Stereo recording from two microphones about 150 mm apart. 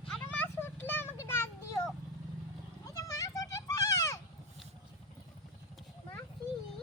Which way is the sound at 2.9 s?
20° left (ahead or behind).